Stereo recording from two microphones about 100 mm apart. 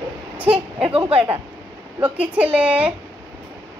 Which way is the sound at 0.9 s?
70° right (ahead or behind).